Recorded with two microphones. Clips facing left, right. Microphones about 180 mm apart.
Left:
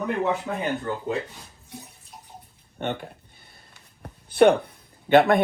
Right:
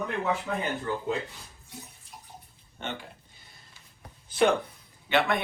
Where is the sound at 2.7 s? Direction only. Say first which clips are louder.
Left 8 dB; 55° left (ahead or behind).